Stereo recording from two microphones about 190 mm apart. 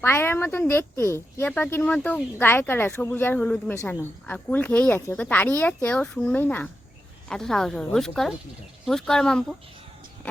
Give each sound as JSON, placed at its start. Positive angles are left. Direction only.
{"t": 0.0, "sound": "a woman's voice", "side_deg": 10}